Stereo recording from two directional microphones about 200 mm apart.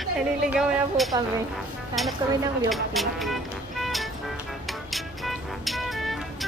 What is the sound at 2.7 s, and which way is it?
Speech, centre (ahead or behind).